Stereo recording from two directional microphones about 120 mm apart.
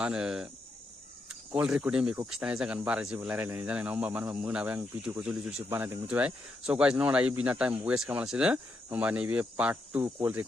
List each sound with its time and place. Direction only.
0.0 s speech: 5° right (ahead or behind)
1.5 s speech: 10° right (ahead or behind)
5.6 s speech: 20° right (ahead or behind)